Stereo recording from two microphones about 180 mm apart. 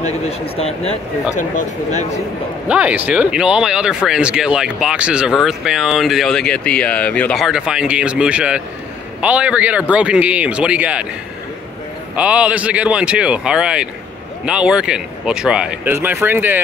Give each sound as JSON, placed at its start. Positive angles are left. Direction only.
{"t": 0.0, "sound": "speech", "side_deg": 35}
{"t": 2.7, "sound": "a man's voice", "side_deg": -10}
{"t": 12.2, "sound": "a man's voice", "side_deg": -5}